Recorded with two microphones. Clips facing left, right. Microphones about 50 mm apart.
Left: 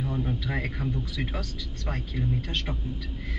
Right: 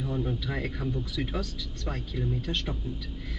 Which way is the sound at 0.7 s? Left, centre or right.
Centre.